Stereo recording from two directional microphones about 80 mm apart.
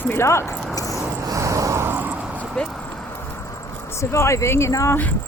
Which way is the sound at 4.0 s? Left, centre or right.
Left.